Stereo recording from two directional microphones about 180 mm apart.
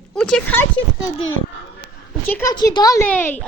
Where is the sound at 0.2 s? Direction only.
5° left (ahead or behind).